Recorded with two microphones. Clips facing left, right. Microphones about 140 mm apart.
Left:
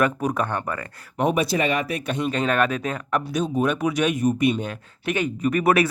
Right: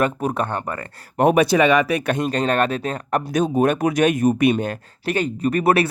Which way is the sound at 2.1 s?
40° right (ahead or behind).